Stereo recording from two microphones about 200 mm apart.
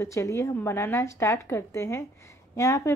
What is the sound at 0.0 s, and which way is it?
A woman's voice, 15° left (ahead or behind).